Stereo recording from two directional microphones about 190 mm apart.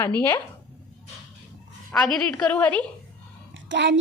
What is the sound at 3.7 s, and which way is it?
Speech, 70° right (ahead or behind).